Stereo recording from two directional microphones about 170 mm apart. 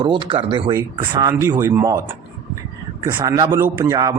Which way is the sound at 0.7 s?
20° right (ahead or behind).